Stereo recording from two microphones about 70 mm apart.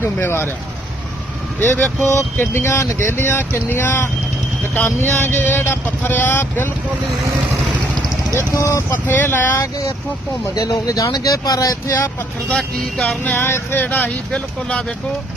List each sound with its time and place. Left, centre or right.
0.0 s speech: left
1.5 s speech: left
2.4 s speech: left
8.4 s speech: left
9.0 s speech: left
10.5 s speech: left
12.5 s speech: centre
13.3 s speech: left
13.8 s speech: left